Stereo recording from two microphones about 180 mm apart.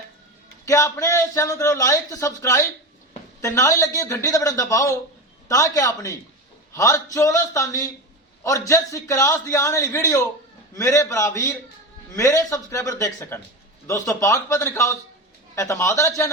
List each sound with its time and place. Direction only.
0.6 s a man's voice: 15° left (ahead or behind)